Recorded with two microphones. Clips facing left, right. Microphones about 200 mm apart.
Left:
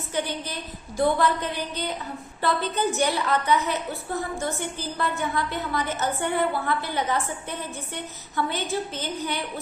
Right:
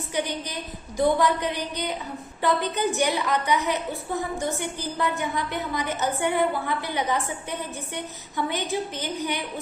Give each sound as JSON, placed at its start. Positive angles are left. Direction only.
{"t": 0.1, "sound": "a woman's voice", "side_deg": -15}